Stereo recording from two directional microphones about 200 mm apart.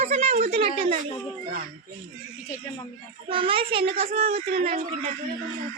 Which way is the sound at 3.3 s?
25° right (ahead or behind).